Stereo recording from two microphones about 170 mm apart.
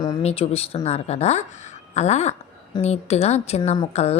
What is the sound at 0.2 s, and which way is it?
A woman's voice, 35° left (ahead or behind).